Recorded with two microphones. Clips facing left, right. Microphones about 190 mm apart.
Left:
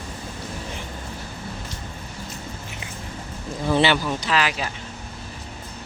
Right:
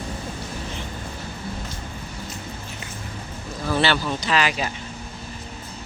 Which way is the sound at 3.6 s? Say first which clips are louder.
Left 2 dB; 20° left (ahead or behind).